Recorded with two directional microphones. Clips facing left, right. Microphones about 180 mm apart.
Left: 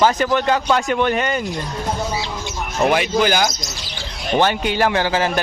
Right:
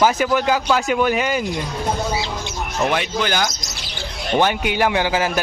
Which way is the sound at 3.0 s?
10° left (ahead or behind).